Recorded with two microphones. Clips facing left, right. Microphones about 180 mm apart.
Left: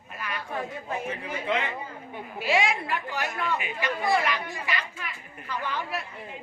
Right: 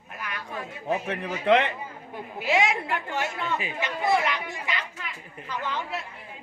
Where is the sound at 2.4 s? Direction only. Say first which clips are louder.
Right 1 dB; 20° right (ahead or behind).